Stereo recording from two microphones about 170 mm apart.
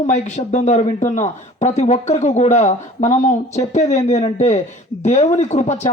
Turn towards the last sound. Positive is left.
turn(degrees=40)  # may be behind; listen again after turning